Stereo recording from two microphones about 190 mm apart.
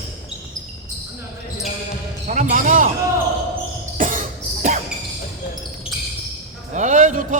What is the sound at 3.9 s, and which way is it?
Cough, 45° right (ahead or behind).